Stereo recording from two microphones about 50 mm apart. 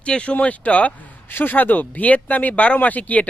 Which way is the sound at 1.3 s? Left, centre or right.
Left.